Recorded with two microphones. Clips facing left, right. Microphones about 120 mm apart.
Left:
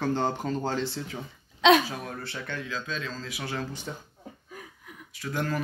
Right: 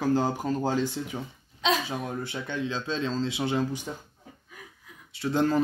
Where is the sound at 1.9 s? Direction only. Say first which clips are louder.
Right 4 dB; 20° right (ahead or behind).